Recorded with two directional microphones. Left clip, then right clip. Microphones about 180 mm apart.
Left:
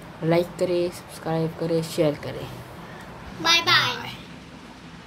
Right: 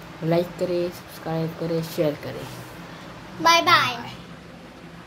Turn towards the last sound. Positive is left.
turn(degrees=-55)  # may be behind; listen again after turning